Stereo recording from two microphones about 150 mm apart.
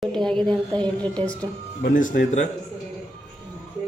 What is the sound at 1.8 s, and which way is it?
Speech, 60° left (ahead or behind).